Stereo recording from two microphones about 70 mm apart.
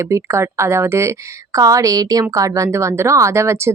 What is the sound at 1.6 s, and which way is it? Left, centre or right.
Speech, right.